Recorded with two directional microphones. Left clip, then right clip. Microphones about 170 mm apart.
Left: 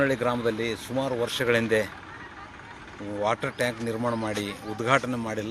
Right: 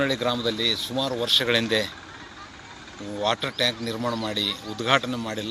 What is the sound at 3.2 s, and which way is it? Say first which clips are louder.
A man's voice: right 2 dB; 10° left (ahead or behind).